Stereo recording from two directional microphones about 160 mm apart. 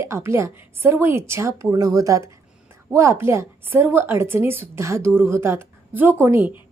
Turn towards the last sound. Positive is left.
turn(degrees=-10)  # may be behind; listen again after turning